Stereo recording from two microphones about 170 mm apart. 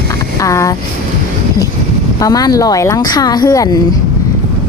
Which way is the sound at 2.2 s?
20° left (ahead or behind).